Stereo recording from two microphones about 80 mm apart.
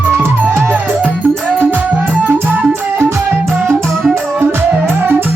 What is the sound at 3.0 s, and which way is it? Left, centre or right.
Music, right.